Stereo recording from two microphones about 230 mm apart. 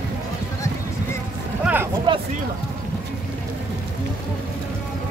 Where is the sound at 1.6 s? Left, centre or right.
Centre.